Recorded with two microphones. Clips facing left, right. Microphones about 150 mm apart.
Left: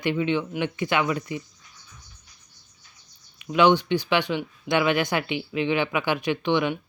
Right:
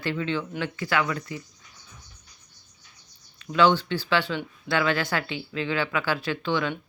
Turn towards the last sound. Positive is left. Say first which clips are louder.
# left 4 dB
turn(degrees=15)  # may be behind; listen again after turning